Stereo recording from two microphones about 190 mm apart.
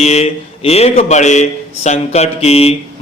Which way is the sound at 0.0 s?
35° left (ahead or behind).